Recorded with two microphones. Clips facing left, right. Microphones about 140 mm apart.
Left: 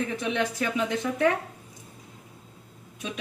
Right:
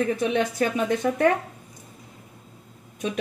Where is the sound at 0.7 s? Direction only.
50° right (ahead or behind).